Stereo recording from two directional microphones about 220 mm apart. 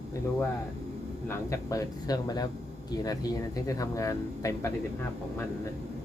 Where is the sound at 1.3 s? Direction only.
15° left (ahead or behind).